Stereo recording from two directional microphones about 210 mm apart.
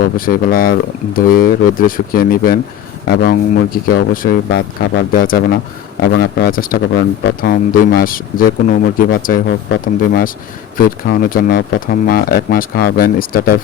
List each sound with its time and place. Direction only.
0.0 s speech: 40° left (ahead or behind)